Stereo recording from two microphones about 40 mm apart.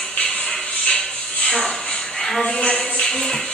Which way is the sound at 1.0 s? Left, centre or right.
Centre.